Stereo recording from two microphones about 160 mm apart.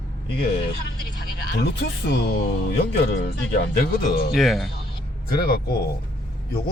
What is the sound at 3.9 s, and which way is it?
Speech, 75° left (ahead or behind).